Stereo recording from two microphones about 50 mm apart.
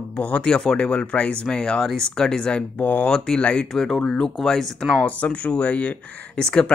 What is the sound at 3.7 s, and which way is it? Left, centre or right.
Speech, centre.